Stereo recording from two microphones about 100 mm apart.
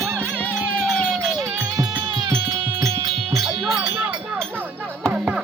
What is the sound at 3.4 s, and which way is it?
Music, 5° right (ahead or behind).